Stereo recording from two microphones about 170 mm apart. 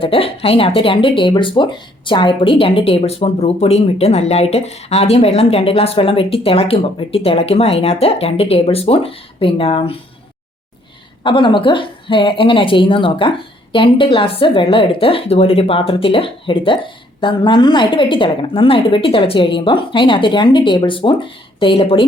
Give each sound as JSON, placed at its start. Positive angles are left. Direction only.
{"t": 0.0, "sound": "speech", "side_deg": 35}
{"t": 11.2, "sound": "a woman's voice", "side_deg": 30}